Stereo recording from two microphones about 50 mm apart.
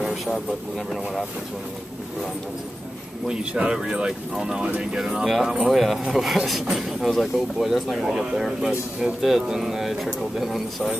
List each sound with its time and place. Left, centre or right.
0.3 s speech: centre
3.3 s speech: centre